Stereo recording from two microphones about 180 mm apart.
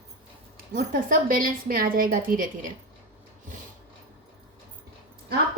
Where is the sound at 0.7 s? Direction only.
50° right (ahead or behind).